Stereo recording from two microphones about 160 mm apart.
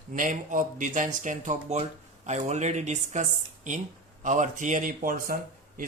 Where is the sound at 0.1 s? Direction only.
50° right (ahead or behind).